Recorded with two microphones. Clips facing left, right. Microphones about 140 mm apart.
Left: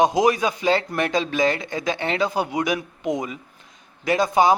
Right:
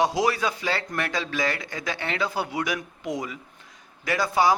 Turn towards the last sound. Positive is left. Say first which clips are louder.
# left 4 dB
turn(degrees=20)  # may be behind; listen again after turning